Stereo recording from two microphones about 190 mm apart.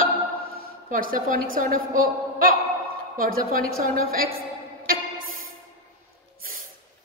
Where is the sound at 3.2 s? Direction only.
50° right (ahead or behind).